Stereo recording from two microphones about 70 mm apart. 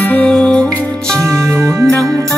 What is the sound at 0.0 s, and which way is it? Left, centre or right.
Music, left.